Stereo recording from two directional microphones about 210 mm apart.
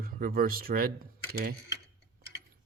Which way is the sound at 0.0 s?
45° right (ahead or behind).